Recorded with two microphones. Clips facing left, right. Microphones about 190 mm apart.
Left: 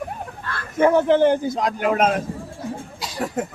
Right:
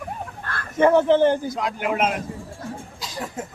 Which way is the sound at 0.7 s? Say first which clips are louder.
Even; 10° left (ahead or behind).